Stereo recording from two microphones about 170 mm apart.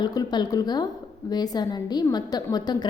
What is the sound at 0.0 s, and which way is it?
A woman's voice, 25° left (ahead or behind).